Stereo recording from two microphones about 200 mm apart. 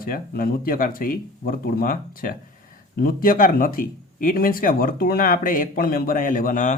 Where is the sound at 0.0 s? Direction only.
45° left (ahead or behind).